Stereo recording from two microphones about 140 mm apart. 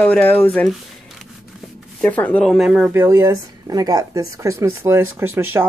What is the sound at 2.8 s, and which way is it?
Speech, 15° right (ahead or behind).